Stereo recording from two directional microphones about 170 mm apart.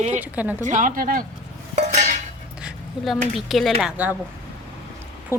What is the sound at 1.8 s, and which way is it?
Dishes, 40° right (ahead or behind).